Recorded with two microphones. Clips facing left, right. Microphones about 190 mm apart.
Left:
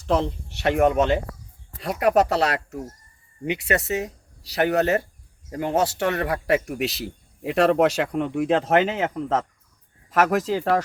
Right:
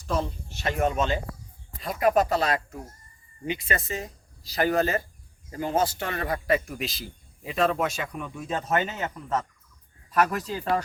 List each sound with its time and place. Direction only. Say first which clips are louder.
0.0 s speech: left 6 dB; 75° left (ahead or behind)